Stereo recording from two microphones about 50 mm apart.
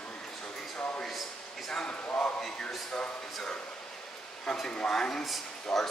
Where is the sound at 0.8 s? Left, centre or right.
Left.